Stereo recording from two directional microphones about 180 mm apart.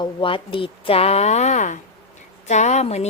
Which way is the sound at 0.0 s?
30° left (ahead or behind).